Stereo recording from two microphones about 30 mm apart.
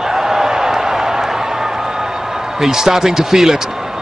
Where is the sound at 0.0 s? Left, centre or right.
Centre.